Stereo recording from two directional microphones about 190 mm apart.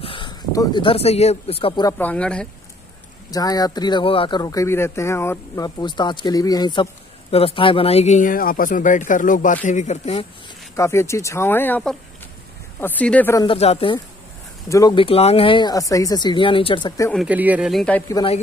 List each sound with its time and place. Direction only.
0.0 s speech: 25° left (ahead or behind)
2.0 s a man's voice: 5° left (ahead or behind)
3.3 s speech: 20° left (ahead or behind); by 10.2 s 35° left (ahead or behind)
10.8 s speech: 15° left (ahead or behind)
13.4 s speech: 30° left (ahead or behind)
17.1 s a man's voice: 5° right (ahead or behind); by 18.2 s 10° left (ahead or behind)